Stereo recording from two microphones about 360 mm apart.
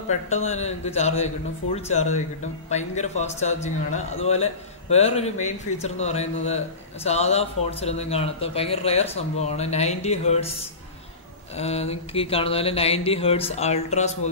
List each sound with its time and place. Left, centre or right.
0.1 s speech: centre